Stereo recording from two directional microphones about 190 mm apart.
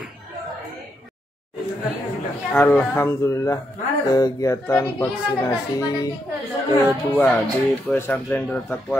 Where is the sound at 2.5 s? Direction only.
10° left (ahead or behind).